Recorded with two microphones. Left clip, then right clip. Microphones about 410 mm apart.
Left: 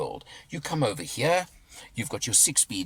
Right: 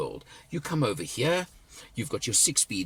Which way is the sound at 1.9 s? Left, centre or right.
Centre.